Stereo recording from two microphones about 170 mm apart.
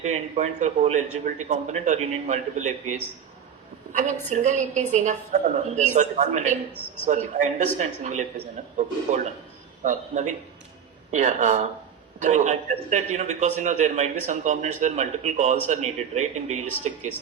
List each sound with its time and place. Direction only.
0.0 s a man's voice: 45° right (ahead or behind)